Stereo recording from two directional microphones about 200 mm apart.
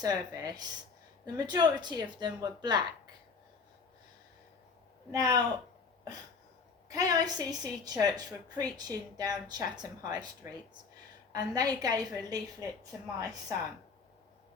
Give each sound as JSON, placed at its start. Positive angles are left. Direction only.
{"t": 0.0, "sound": "a woman's voice", "side_deg": -20}
{"t": 5.1, "sound": "speech", "side_deg": -20}
{"t": 6.8, "sound": "a woman's voice", "side_deg": -20}